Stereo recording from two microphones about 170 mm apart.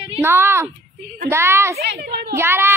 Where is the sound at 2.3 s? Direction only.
15° right (ahead or behind).